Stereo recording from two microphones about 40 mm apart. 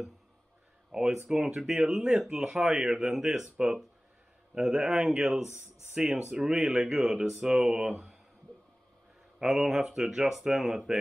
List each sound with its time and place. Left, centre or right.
0.9 s speech: centre
4.9 s speech: right
9.4 s speech: centre